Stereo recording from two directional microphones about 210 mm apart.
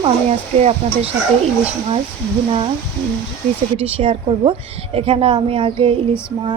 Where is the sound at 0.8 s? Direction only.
30° right (ahead or behind).